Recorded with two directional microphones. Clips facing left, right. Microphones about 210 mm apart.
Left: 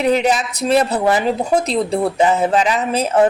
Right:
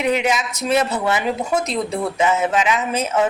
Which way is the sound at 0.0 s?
35° left (ahead or behind).